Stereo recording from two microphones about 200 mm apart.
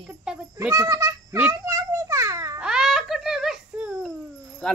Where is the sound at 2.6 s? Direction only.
5° right (ahead or behind).